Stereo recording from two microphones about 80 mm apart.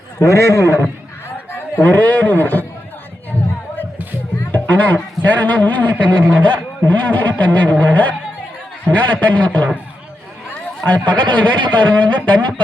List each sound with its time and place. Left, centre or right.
0.2 s a man's voice: left
4.5 s a man's voice: centre
10.8 s a man's voice: centre